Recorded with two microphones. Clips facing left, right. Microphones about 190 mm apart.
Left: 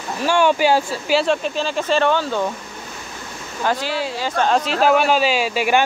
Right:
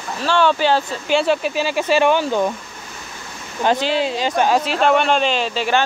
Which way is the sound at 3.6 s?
20° right (ahead or behind).